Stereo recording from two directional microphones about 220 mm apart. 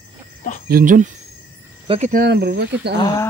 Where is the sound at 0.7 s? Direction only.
40° right (ahead or behind).